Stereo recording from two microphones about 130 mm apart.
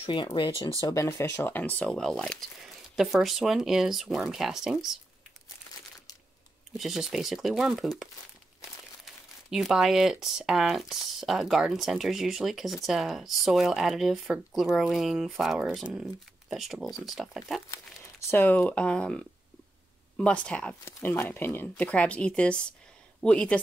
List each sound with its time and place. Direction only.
0.0 s speech: 40° left (ahead or behind); by 4.9 s 5° right (ahead or behind)
6.8 s speech: 5° right (ahead or behind)
18.3 s speech: 15° left (ahead or behind)